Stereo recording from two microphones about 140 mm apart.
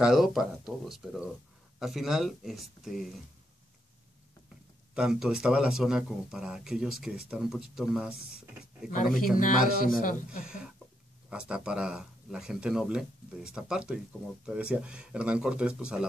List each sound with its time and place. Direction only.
0.0 s speech: 5° right (ahead or behind)
4.9 s speech: 5° right (ahead or behind)
8.8 s a man's voice: 70° left (ahead or behind)
9.4 s a man's voice: 85° left
10.4 s speech: 5° right (ahead or behind)